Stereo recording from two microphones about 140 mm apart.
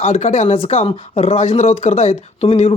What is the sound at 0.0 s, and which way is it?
Speech, 50° left (ahead or behind).